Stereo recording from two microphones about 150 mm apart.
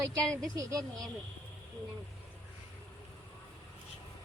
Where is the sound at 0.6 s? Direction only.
25° right (ahead or behind).